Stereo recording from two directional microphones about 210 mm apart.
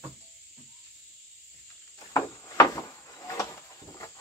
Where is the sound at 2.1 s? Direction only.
15° left (ahead or behind).